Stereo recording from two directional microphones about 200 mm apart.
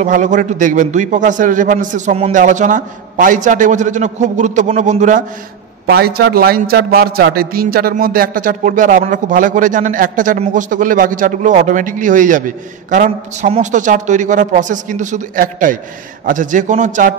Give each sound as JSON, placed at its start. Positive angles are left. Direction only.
{"t": 0.0, "sound": "a man's voice", "side_deg": -40}
{"t": 5.9, "sound": "a man's voice", "side_deg": -50}